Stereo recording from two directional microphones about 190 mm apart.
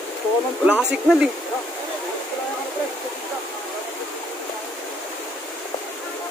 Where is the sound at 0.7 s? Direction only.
5° right (ahead or behind).